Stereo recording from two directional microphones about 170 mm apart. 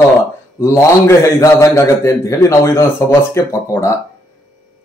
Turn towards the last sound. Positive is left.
turn(degrees=15)  # may be behind; listen again after turning